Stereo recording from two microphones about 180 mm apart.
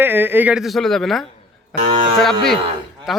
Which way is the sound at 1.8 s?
35° right (ahead or behind).